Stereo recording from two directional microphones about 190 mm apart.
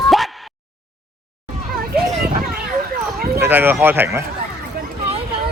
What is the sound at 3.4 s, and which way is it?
Speech, 10° right (ahead or behind).